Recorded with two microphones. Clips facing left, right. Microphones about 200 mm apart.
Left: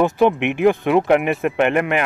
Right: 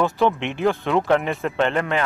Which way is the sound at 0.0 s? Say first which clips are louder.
Left 4 dB; 15° left (ahead or behind).